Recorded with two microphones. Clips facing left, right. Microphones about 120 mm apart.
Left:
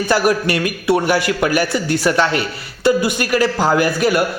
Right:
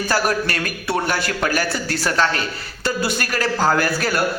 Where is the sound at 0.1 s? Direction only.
15° left (ahead or behind).